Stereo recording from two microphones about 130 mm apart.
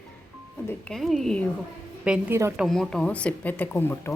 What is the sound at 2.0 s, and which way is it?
Speech, 5° right (ahead or behind).